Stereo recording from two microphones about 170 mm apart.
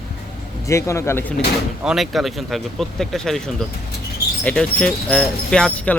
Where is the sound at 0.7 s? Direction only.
15° left (ahead or behind).